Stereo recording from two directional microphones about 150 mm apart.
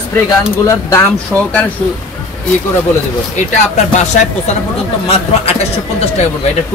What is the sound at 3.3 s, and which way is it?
A man's voice, 50° left (ahead or behind).